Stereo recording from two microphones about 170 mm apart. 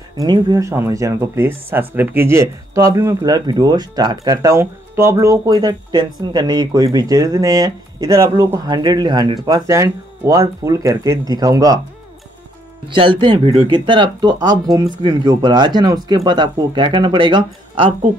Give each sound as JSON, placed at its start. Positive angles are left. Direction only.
{"t": 0.2, "sound": "speech", "side_deg": -25}
{"t": 12.8, "sound": "speech", "side_deg": -30}